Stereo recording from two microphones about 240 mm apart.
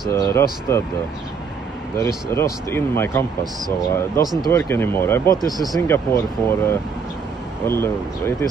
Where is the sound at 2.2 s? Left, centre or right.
Centre.